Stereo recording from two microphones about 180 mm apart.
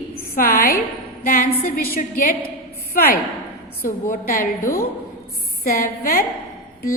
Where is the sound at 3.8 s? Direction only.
50° left (ahead or behind).